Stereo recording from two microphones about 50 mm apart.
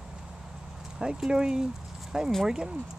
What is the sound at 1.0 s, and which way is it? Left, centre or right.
Speech, centre.